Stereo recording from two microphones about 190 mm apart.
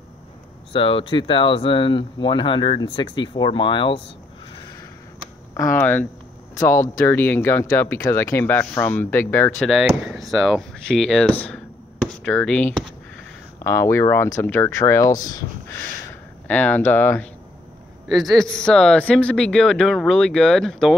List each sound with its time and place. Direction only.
0.7 s speech: 30° left (ahead or behind)
5.6 s speech: 10° left (ahead or behind)
9.6 s speech: centre (ahead or behind)
18.0 s speech: centre (ahead or behind)